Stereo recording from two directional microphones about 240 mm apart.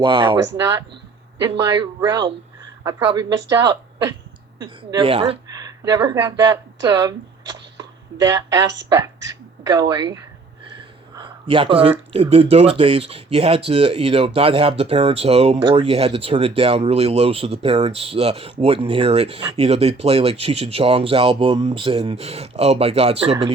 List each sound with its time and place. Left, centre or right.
0.0 s speech: right
11.2 s speech: right